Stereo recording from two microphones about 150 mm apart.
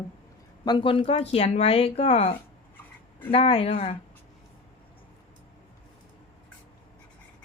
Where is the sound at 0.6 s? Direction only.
30° left (ahead or behind).